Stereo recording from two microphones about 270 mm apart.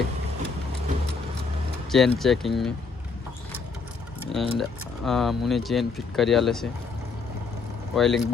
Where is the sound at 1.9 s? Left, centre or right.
Centre.